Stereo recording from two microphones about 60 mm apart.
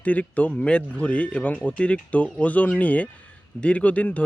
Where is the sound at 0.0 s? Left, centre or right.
Left.